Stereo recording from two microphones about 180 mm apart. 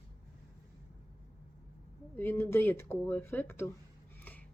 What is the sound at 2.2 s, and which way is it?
Speech, 10° left (ahead or behind).